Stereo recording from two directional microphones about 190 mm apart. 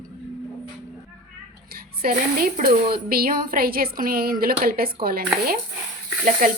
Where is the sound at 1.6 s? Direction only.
50° right (ahead or behind).